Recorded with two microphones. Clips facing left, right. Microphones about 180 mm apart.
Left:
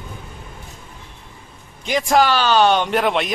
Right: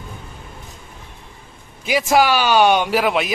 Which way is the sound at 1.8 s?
5° right (ahead or behind).